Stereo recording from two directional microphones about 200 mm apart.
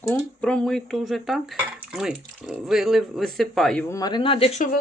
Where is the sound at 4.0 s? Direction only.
20° left (ahead or behind).